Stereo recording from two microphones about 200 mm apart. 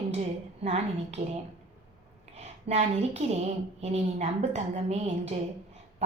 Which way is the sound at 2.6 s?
30° right (ahead or behind).